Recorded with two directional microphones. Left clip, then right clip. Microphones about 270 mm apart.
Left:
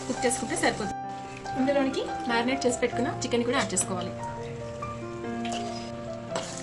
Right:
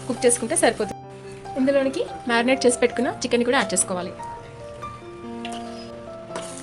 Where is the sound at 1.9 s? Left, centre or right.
Right.